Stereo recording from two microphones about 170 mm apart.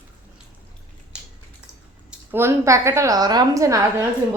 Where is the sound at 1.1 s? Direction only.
5° right (ahead or behind).